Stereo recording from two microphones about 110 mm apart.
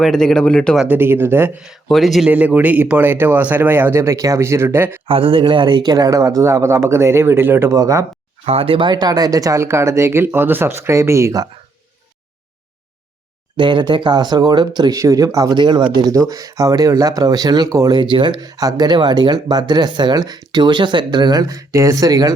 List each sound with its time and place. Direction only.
0.0 s speech: 5° left (ahead or behind)
0.9 s speech: 20° right (ahead or behind)
1.9 s speech: centre (ahead or behind)
2.3 s speech: 15° right (ahead or behind)
5.0 s speech: 55° right (ahead or behind); by 8.0 s 30° right (ahead or behind)
8.4 s speech: 60° right (ahead or behind); by 11.4 s 30° right (ahead or behind)
13.6 s speech: 45° right (ahead or behind)
15.5 s speech: 45° right (ahead or behind)
16.3 s speech: 30° right (ahead or behind)
17.9 s speech: 45° right (ahead or behind)